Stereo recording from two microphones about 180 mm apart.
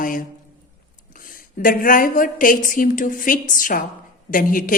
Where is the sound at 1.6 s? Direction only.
50° left (ahead or behind).